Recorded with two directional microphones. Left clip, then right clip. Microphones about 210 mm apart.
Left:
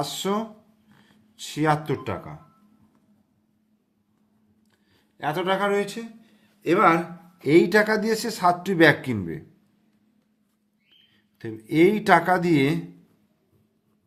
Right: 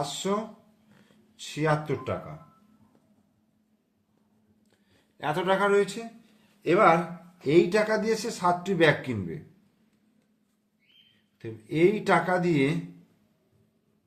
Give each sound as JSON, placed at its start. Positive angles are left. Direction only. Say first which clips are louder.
{"t": 0.0, "sound": "speech", "louder": "left 3 dB", "side_deg": 35}
{"t": 5.1, "sound": "speech", "louder": "left 1 dB", "side_deg": 20}
{"t": 11.3, "sound": "speech", "louder": "left 5 dB", "side_deg": 35}